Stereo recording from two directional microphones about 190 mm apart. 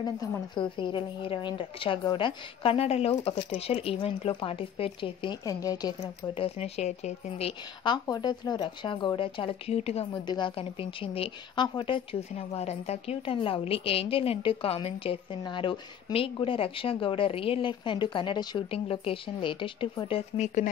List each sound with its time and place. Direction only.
0.0 s a woman's voice: 20° left (ahead or behind); by 20.7 s 40° left (ahead or behind)